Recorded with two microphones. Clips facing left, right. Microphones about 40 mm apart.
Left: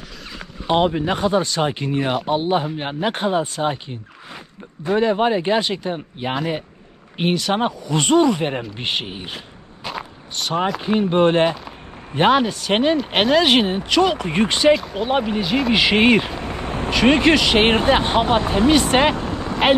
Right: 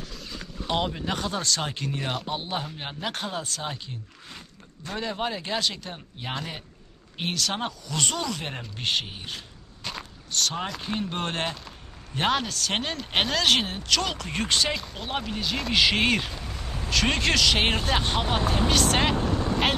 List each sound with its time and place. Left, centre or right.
0.7 s speech: left
4.8 s speech: left
9.8 s walk: centre
10.7 s speech: left
13.1 s speech: centre
13.4 s speech: left
16.3 s a sound: left
16.9 s speech: left
17.6 s speech: left